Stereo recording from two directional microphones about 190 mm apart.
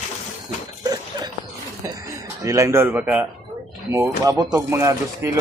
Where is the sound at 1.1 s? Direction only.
25° right (ahead or behind).